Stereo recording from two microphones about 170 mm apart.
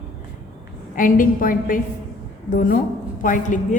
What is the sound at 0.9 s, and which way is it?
A woman's voice, 55° left (ahead or behind).